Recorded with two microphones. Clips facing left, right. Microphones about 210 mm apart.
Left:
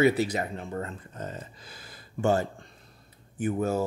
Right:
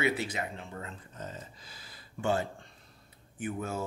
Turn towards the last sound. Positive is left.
turn(degrees=40)  # may be behind; listen again after turning